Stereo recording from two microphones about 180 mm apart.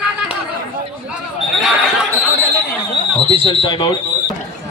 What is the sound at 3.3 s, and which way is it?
Speech, 30° left (ahead or behind).